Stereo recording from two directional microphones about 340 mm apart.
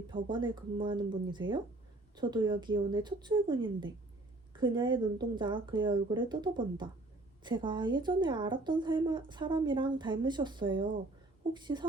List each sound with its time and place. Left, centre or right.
0.1 s a woman's voice: centre